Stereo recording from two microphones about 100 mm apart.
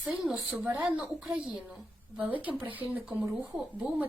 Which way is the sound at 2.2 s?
15° right (ahead or behind).